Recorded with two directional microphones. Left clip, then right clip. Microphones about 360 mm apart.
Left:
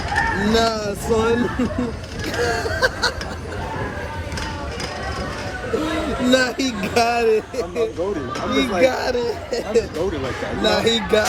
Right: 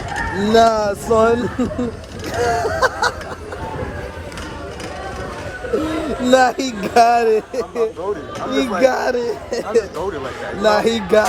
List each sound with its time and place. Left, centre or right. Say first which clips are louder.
0.4 s speech: right 6 dB; centre
2.4 s speech: right 3 dB; centre
6.2 s speech: right 5 dB; centre